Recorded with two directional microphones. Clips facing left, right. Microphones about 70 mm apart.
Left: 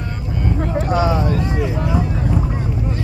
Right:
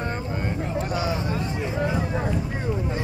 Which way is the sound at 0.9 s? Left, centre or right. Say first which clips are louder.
Left 11 dB; left.